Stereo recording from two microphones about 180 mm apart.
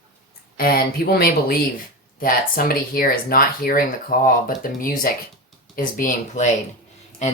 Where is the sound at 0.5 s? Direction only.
55° left (ahead or behind).